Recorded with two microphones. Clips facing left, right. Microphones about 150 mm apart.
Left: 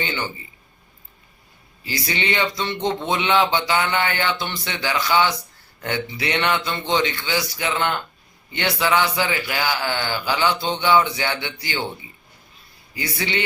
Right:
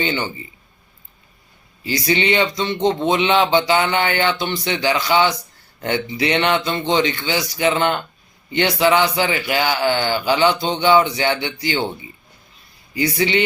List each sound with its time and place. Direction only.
1.8 s speech: 20° right (ahead or behind)